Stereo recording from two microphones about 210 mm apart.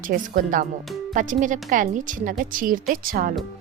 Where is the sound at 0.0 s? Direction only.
40° right (ahead or behind).